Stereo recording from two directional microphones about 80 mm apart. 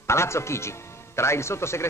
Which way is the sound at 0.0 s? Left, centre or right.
Left.